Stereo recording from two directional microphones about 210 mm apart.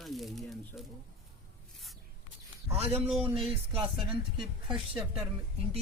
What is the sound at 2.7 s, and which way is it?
Speech, 30° right (ahead or behind).